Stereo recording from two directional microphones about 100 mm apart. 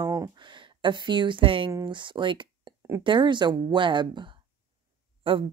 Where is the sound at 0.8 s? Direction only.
50° right (ahead or behind).